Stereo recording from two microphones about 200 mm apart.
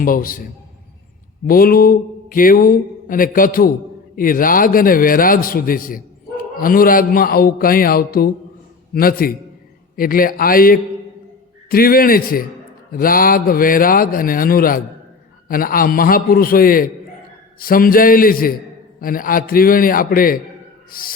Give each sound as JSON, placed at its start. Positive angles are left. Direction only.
{"t": 0.0, "sound": "a man's voice", "side_deg": 45}
{"t": 1.5, "sound": "a man's voice", "side_deg": 45}